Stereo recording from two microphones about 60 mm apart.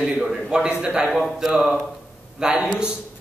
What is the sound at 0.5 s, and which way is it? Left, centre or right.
Speech, centre.